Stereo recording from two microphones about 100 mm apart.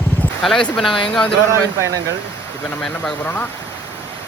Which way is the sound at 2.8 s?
5° left (ahead or behind).